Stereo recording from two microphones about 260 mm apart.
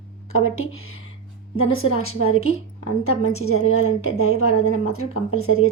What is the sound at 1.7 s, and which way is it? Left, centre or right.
A woman's voice, left.